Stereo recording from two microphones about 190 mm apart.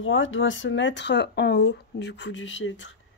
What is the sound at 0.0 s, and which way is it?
Speech, 90° left.